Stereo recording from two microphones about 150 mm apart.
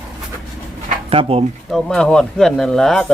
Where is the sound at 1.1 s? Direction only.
40° right (ahead or behind).